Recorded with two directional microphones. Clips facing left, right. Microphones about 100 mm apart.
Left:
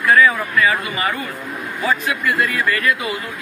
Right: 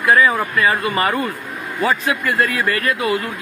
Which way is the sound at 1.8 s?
40° right (ahead or behind).